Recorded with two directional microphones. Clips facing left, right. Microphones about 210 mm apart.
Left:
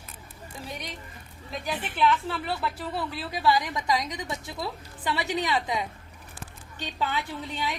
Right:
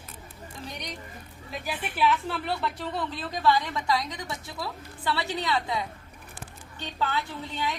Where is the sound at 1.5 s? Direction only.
5° right (ahead or behind); by 7.7 s 15° left (ahead or behind).